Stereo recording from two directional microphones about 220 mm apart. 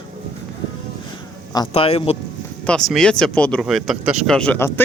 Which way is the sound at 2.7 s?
Centre (ahead or behind).